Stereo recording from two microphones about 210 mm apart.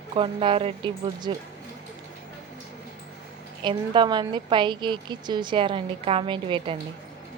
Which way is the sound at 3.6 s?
20° right (ahead or behind).